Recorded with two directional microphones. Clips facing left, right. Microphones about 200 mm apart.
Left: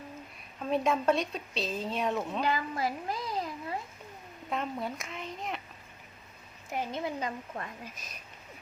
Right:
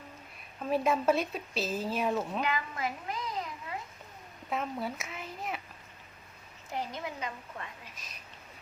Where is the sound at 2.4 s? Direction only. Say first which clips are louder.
Left 3 dB; 35° left (ahead or behind).